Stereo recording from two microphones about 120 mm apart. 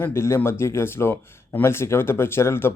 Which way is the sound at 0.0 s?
20° left (ahead or behind).